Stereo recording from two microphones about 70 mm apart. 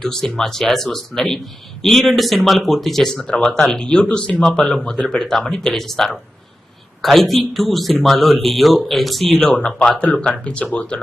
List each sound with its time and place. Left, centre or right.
0.0 s speech: centre
9.4 s speech: centre